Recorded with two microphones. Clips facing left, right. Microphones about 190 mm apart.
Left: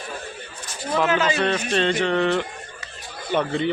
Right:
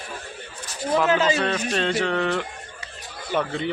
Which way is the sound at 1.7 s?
5° right (ahead or behind).